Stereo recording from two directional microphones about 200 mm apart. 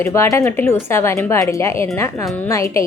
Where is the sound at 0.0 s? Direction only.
15° left (ahead or behind).